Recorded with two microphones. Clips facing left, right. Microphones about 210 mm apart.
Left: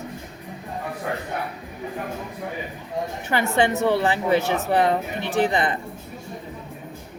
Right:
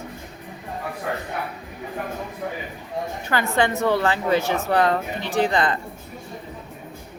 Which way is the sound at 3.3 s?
20° left (ahead or behind).